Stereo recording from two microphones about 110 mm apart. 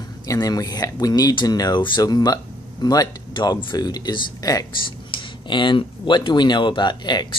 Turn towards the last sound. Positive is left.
turn(degrees=40)  # may be behind; listen again after turning